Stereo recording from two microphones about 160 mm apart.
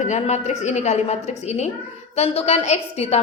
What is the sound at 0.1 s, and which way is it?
A woman's voice, 45° left (ahead or behind).